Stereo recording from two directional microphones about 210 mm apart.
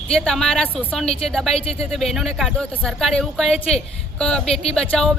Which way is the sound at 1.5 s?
30° left (ahead or behind).